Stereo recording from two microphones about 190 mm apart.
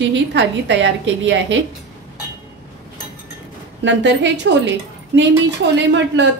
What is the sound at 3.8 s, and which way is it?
A woman's voice, 65° right (ahead or behind).